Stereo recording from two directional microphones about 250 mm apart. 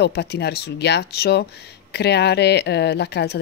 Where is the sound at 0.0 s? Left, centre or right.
Left.